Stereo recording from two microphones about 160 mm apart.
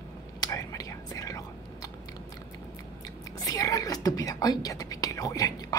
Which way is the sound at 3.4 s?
20° left (ahead or behind).